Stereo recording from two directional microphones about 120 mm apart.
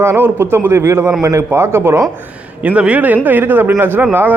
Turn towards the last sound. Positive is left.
turn(degrees=-15)  # may be behind; listen again after turning